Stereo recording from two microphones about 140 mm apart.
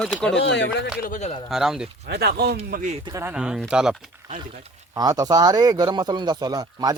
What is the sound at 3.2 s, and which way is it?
Speech, 5° right (ahead or behind).